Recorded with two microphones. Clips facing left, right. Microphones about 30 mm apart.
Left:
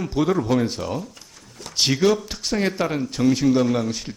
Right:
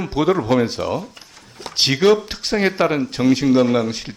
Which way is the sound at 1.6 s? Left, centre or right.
Right.